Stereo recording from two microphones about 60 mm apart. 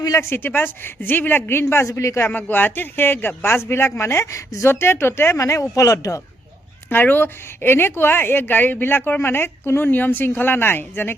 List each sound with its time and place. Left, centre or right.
0.2 s speech: left
1.9 s speech: left
2.2 s speech: left
3.6 s a woman's voice: left
4.7 s a woman's voice: left
5.4 s speech: left
6.9 s speech: left